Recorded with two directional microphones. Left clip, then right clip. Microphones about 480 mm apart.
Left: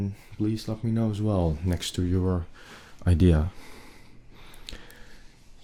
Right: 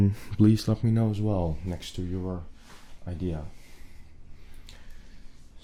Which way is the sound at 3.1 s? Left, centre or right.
Left.